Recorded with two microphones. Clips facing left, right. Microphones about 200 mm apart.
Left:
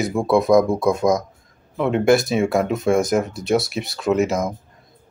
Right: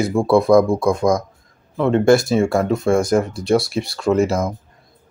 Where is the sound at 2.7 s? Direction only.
20° left (ahead or behind).